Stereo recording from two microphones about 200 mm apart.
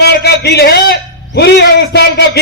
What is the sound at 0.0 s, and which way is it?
A man's voice, 55° left (ahead or behind).